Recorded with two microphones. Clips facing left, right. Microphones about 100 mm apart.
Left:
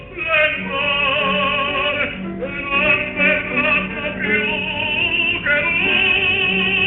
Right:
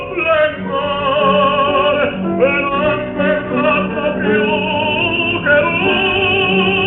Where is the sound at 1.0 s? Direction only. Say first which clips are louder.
Right 9 dB; 30° right (ahead or behind).